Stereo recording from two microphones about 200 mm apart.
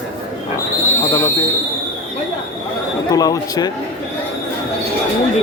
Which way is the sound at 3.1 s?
15° left (ahead or behind).